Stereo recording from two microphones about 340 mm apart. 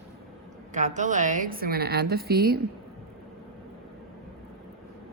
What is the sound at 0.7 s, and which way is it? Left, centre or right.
A woman's voice, right.